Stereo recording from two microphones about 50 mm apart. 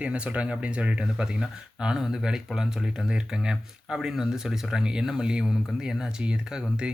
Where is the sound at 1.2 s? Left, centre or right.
Centre.